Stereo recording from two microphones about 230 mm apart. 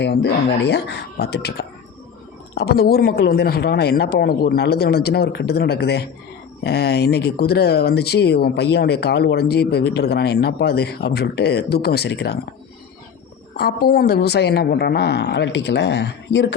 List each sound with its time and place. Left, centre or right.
0.0 s speech: left
13.6 s speech: left